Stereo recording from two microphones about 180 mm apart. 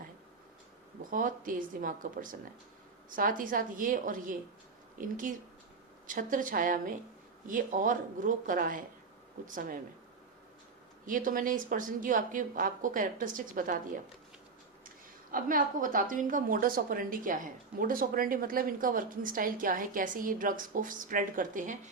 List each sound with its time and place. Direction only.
1.1 s a woman's voice: 50° right (ahead or behind)
11.0 s a woman's voice: 50° right (ahead or behind)